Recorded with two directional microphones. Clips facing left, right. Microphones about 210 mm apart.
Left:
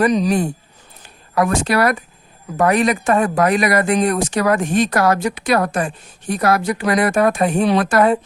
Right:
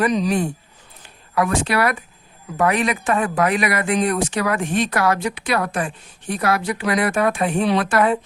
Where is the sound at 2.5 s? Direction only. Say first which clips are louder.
Left 4 dB; 40° left (ahead or behind).